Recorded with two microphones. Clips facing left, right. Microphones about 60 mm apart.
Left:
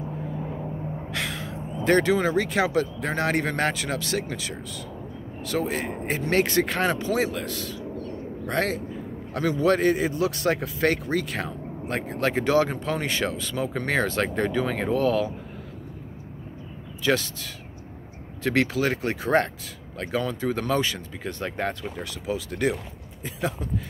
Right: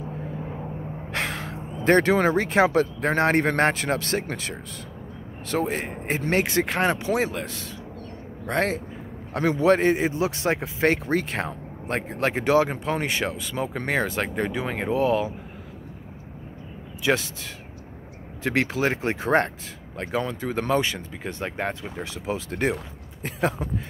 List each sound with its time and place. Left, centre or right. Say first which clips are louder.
1.1 s a sound: right 4 dB; right
2.2 s speech: right 3 dB; right
5.5 s speech: right 1 dB; right
17.0 s speech: even; right